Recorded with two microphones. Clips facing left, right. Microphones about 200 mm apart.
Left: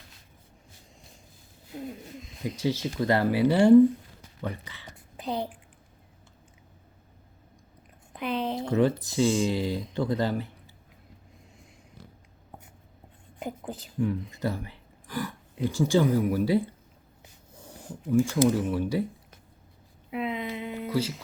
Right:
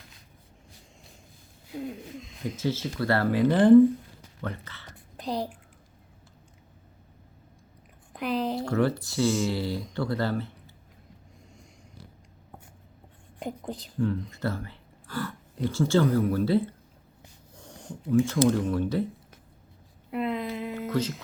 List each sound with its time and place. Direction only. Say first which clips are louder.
1.7 s speech: right 2 dB; centre (ahead or behind)
2.4 s speech: left 1 dB; 15° left (ahead or behind)
5.1 s a woman's voice: even; centre (ahead or behind)
8.1 s a woman's voice: right 1 dB; centre (ahead or behind)
8.6 s speech: left 2 dB; 20° left (ahead or behind)
13.4 s speech: right 1 dB; 5° left (ahead or behind)
17.6 s a sound: even; 5° left (ahead or behind)
18.4 s speech: even; 5° left (ahead or behind)
20.1 s a sound: right 2 dB; centre (ahead or behind)